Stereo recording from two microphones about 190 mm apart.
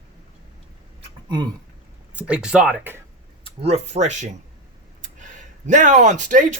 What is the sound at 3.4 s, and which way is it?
Speech, 35° right (ahead or behind).